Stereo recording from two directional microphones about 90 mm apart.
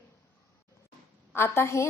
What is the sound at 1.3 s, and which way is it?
Speech, 25° left (ahead or behind).